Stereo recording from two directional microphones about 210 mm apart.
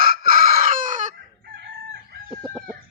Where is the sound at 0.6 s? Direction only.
40° right (ahead or behind).